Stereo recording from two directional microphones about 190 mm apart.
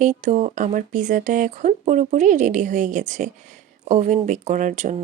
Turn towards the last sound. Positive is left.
turn(degrees=-40)  # may be behind; listen again after turning